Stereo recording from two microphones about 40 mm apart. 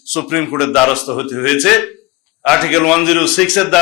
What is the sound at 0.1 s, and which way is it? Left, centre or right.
A man's voice, centre.